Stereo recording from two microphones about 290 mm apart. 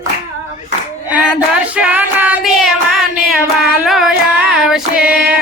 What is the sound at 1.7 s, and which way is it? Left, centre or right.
Music, centre.